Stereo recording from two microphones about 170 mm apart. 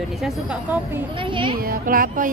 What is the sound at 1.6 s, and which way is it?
Speech, 55° right (ahead or behind).